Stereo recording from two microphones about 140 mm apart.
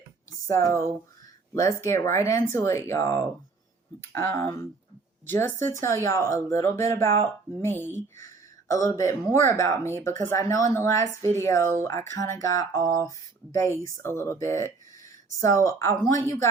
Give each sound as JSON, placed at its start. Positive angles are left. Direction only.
{"t": 0.4, "sound": "speech", "side_deg": 20}